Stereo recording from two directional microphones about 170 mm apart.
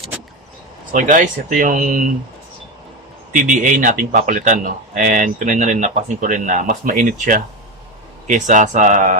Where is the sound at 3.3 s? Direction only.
50° right (ahead or behind).